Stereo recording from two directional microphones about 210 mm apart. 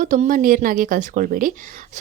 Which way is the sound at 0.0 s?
40° right (ahead or behind).